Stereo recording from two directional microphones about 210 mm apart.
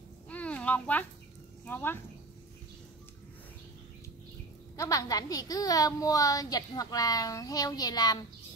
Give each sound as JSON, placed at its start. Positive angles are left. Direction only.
{"t": 0.3, "sound": "a sound", "side_deg": 5}
{"t": 1.7, "sound": "a woman's voice", "side_deg": 10}
{"t": 4.7, "sound": "a woman's voice", "side_deg": 15}